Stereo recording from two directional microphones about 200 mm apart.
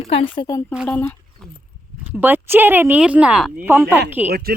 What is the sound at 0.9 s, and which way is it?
Speech, 10° left (ahead or behind).